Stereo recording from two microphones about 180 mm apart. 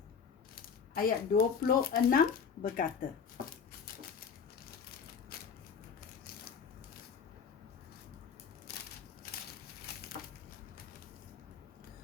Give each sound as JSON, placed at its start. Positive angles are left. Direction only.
{"t": 0.5, "sound": "speech", "side_deg": 55}